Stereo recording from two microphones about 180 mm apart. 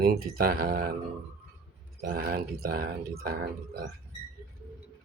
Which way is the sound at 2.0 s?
55° right (ahead or behind).